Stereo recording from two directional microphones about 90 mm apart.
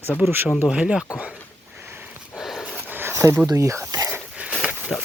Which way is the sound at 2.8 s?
20° right (ahead or behind).